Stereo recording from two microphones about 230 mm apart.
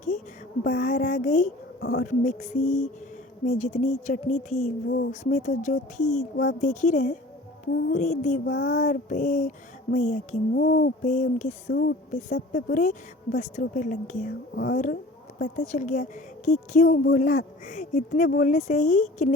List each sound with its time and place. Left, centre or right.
0.6 s a woman's voice: left
6.3 s a woman's voice: left
11.7 s a woman's voice: left